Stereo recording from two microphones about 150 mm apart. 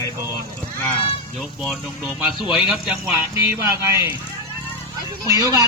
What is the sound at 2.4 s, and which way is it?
Speech, 30° left (ahead or behind).